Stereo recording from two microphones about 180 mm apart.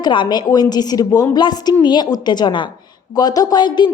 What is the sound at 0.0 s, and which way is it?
A woman's voice, 25° left (ahead or behind).